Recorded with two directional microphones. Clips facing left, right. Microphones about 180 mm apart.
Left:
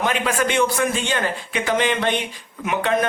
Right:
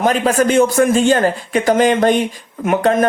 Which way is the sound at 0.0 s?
40° right (ahead or behind).